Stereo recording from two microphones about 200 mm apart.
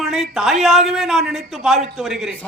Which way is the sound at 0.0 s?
Centre (ahead or behind).